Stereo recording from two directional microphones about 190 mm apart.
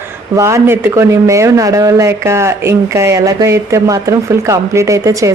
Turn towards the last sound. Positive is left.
turn(degrees=-15)  # may be behind; listen again after turning